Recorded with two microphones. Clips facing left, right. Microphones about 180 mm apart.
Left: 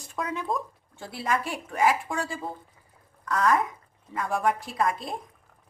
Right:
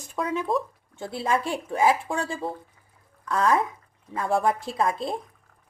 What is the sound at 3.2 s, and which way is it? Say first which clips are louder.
A woman's voice: right 1 dB; 30° right (ahead or behind).